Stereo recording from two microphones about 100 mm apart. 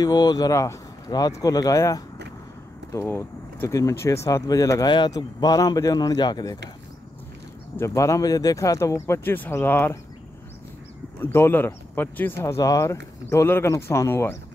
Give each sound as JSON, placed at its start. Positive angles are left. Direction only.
{"t": 0.0, "sound": "speech", "side_deg": 40}
{"t": 4.8, "sound": "speech", "side_deg": 50}
{"t": 5.1, "sound": "speech", "side_deg": 40}
{"t": 7.7, "sound": "speech", "side_deg": 30}
{"t": 11.1, "sound": "speech", "side_deg": 25}